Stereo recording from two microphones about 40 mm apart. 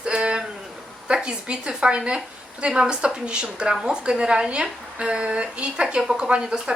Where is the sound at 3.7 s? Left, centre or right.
Centre.